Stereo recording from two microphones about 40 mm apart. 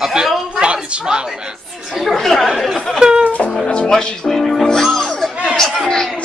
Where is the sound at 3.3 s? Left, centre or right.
Left.